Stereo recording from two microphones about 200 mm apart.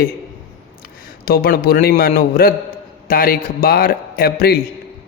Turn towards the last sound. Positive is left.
turn(degrees=50)  # may be behind; listen again after turning